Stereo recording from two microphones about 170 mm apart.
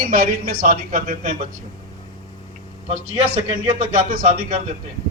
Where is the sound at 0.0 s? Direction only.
55° right (ahead or behind).